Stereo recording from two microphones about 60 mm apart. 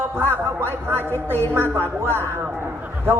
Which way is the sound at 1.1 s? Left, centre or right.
Left.